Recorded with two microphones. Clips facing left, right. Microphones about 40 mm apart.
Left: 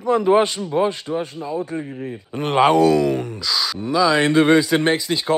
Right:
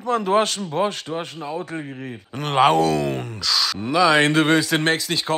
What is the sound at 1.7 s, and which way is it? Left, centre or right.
Speech, centre.